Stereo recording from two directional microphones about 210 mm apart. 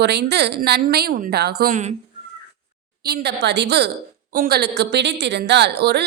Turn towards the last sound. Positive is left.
turn(degrees=-50)  # may be behind; listen again after turning